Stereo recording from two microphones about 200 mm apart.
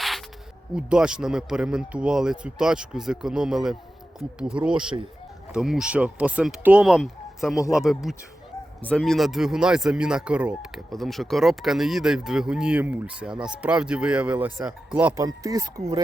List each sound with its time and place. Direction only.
0.8 s speech: 5° right (ahead or behind)